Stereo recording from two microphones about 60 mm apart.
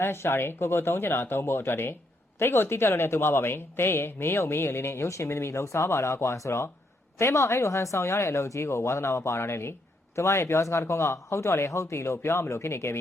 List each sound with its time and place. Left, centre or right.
0.0 s speech: left